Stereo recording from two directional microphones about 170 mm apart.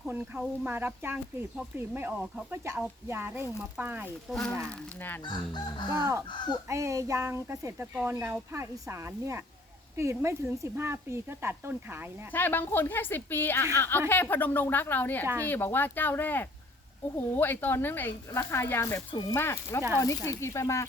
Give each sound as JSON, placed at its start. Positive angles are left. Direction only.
{"t": 0.0, "sound": "speech", "side_deg": -5}
{"t": 4.3, "sound": "speech", "side_deg": 5}
{"t": 5.2, "sound": "chicken", "side_deg": 25}
{"t": 5.9, "sound": "speech", "side_deg": -15}
{"t": 6.2, "sound": "chicken", "side_deg": 25}
{"t": 6.7, "sound": "speech", "side_deg": -20}
{"t": 12.3, "sound": "speech", "side_deg": 10}